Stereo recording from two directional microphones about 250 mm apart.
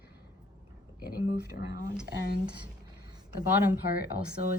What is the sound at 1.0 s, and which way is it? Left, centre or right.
Speech, left.